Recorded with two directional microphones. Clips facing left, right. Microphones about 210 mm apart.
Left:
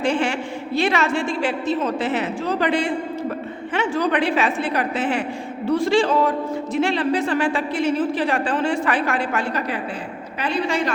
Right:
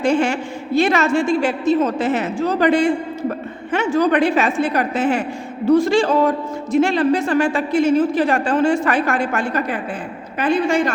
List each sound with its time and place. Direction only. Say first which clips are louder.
0.0 s a woman's voice: right 4 dB; 45° right (ahead or behind)